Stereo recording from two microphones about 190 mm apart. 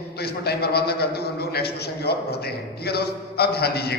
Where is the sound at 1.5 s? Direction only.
55° left (ahead or behind).